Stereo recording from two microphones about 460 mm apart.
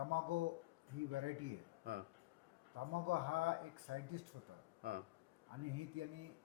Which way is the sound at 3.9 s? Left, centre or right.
Right.